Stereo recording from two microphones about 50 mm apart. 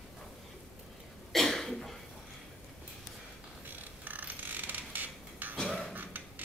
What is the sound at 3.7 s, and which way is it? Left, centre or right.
Mechanisms, right.